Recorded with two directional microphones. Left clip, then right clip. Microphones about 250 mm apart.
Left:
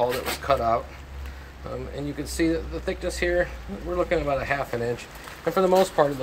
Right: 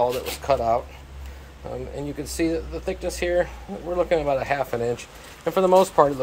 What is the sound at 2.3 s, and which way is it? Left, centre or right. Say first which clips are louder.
Speech: even; centre.